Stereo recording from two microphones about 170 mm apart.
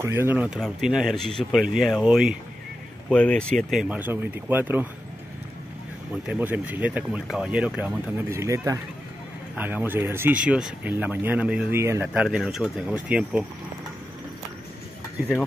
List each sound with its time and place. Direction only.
0.0 s speech: 15° right (ahead or behind)
6.2 s speech: 10° right (ahead or behind)